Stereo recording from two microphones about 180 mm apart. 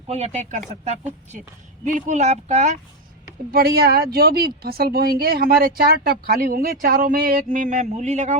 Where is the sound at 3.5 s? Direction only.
60° right (ahead or behind); by 8.4 s 40° right (ahead or behind).